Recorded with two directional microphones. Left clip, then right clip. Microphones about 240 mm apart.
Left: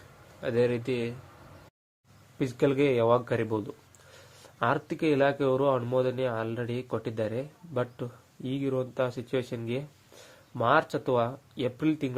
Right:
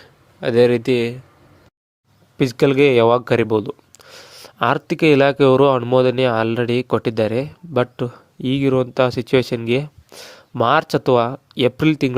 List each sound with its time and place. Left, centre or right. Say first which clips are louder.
0.4 s speech: right 12 dB; right
2.4 s speech: right 11 dB; right